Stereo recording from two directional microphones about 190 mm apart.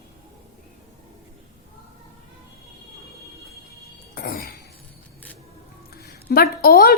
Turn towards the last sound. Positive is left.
turn(degrees=55)  # may be behind; listen again after turning